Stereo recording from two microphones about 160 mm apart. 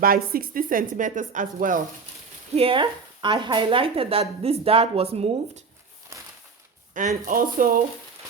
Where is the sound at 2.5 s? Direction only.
35° right (ahead or behind).